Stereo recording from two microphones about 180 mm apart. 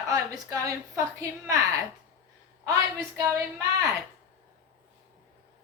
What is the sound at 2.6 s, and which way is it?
Speech, 20° right (ahead or behind).